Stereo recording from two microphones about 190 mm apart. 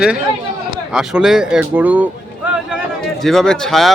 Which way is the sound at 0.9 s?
5° right (ahead or behind).